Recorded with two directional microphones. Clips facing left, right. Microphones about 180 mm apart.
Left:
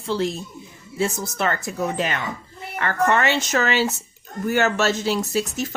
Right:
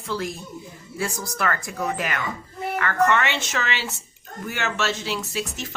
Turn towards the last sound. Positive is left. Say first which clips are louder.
# left 6 dB
turn(degrees=40)  # may be behind; listen again after turning